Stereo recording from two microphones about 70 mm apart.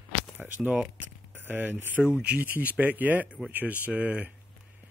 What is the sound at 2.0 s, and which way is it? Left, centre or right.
Speech, centre.